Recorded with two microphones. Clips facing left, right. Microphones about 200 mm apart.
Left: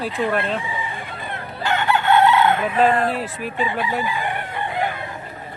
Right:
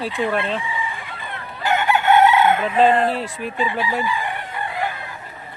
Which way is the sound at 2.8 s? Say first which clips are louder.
Right 2 dB; 25° right (ahead or behind).